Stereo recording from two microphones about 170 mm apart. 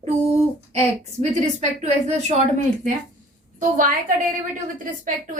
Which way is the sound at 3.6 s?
50° right (ahead or behind).